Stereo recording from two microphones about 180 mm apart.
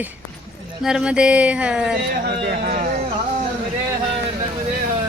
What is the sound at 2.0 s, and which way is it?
Speech, 60° right (ahead or behind).